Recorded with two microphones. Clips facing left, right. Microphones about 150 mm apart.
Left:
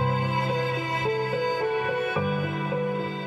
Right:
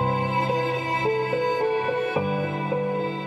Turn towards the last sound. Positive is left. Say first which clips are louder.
# right 2 dB
turn(degrees=-30)  # may be behind; listen again after turning